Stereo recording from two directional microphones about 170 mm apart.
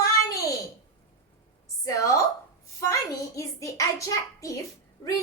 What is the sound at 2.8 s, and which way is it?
A woman's voice, 20° left (ahead or behind).